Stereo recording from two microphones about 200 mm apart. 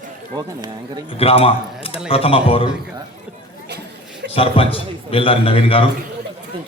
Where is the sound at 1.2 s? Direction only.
30° left (ahead or behind).